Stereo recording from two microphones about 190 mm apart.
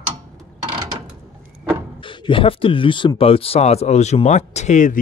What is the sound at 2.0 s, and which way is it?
Speech, 25° left (ahead or behind).